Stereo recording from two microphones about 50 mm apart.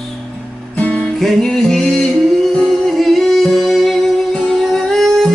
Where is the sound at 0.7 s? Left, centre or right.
Left.